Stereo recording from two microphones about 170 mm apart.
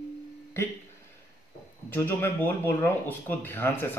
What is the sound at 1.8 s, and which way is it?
Speech, 10° left (ahead or behind).